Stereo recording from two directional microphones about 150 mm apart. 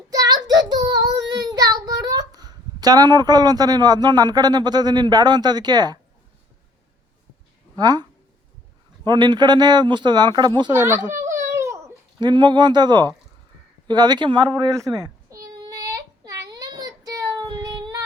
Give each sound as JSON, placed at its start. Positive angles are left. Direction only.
{"t": 0.1, "sound": "child singing", "side_deg": -25}
{"t": 2.8, "sound": "speech", "side_deg": -25}
{"t": 7.8, "sound": "speech", "side_deg": -25}
{"t": 9.0, "sound": "speech", "side_deg": -30}
{"t": 10.7, "sound": "speech", "side_deg": -15}
{"t": 11.2, "sound": "a sound", "side_deg": -15}
{"t": 12.2, "sound": "speech", "side_deg": -30}
{"t": 14.8, "sound": "a sound", "side_deg": -20}